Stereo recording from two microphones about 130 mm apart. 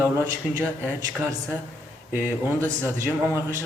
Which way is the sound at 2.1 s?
15° right (ahead or behind).